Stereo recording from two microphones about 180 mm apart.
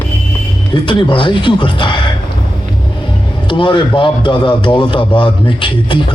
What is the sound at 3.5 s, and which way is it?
Speech, 25° left (ahead or behind).